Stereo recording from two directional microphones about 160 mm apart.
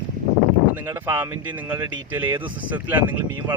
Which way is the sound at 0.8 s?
20° right (ahead or behind).